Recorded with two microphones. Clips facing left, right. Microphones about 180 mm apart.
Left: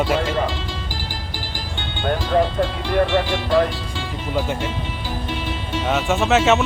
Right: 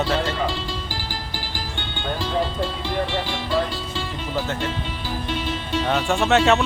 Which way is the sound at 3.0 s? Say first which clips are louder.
Left 8 dB; 60° left (ahead or behind).